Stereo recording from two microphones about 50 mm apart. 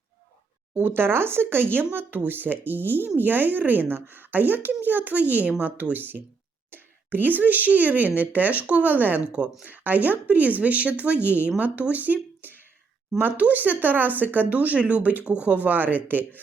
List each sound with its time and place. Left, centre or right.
0.7 s speech: right
9.3 s speech: right
9.6 s speech: right